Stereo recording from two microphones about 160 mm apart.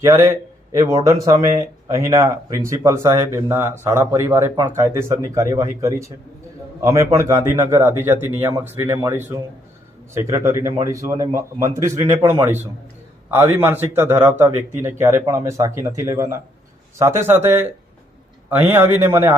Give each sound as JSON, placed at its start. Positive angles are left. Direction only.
{"t": 0.0, "sound": "a man's voice", "side_deg": -15}
{"t": 14.5, "sound": "speech", "side_deg": -50}
{"t": 14.9, "sound": "a man's voice", "side_deg": -15}